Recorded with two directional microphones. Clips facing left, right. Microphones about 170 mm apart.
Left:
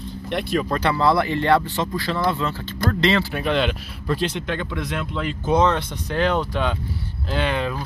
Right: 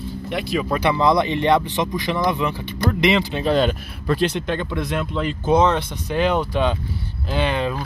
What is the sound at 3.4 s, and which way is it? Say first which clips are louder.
Speech: right 3 dB; 40° right (ahead or behind).